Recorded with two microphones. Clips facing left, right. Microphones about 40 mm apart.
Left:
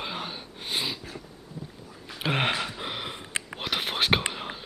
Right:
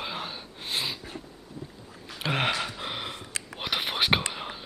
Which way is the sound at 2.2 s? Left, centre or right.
Centre.